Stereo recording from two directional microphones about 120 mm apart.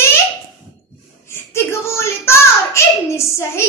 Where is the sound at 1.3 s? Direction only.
20° left (ahead or behind).